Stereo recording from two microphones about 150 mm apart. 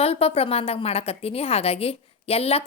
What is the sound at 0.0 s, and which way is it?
A woman's voice, 40° left (ahead or behind).